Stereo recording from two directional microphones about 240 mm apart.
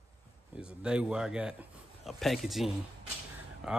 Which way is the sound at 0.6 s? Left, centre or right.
Centre.